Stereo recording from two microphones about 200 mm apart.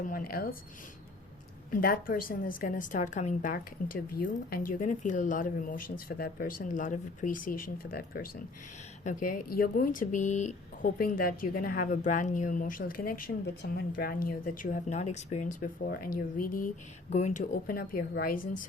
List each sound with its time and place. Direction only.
0.1 s speech: 45° left (ahead or behind)
1.7 s speech: 45° left (ahead or behind)